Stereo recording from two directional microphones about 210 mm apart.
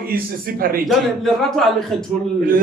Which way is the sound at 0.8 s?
Centre (ahead or behind).